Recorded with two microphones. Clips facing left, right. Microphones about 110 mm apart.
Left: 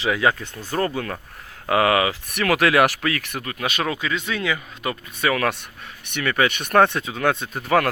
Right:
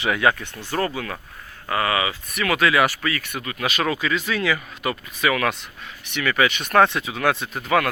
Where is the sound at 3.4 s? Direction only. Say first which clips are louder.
Right 2 dB; 35° left (ahead or behind).